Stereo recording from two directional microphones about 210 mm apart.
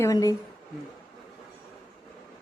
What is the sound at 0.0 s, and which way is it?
Speech, 15° left (ahead or behind).